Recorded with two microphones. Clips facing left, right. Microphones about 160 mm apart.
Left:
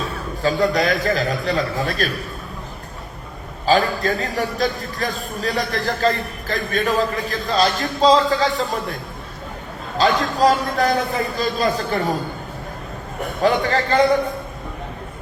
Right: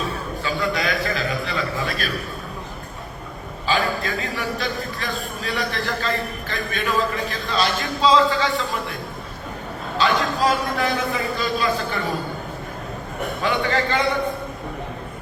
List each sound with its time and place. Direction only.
0.4 s speech: 40° left (ahead or behind)
3.7 s speech: 40° left (ahead or behind)
10.0 s speech: 40° left (ahead or behind)
13.4 s speech: 40° left (ahead or behind)